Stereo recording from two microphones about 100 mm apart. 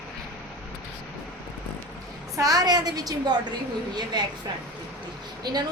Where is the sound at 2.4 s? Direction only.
35° right (ahead or behind).